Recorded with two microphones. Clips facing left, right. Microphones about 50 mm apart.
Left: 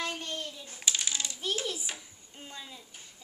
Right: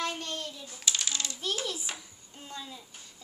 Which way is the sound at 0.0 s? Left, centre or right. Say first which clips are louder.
Right 1 dB; centre.